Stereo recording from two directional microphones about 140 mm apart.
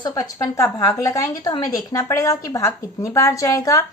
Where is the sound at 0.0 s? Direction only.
25° left (ahead or behind).